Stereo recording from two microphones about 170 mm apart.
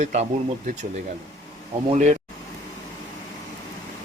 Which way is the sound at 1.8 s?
45° right (ahead or behind).